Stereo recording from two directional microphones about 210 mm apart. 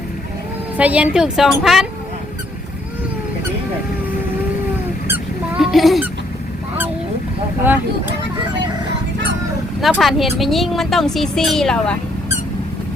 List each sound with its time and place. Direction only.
0.8 s speech: 5° right (ahead or behind)
5.0 s honk: 5° right (ahead or behind)
7.6 s speech: 10° right (ahead or behind)
9.8 s speech: centre (ahead or behind)